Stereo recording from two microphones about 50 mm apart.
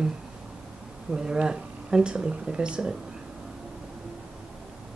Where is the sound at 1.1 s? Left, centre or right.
Centre.